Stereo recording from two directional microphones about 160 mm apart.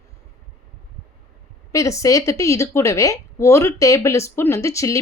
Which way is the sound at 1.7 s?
20° left (ahead or behind).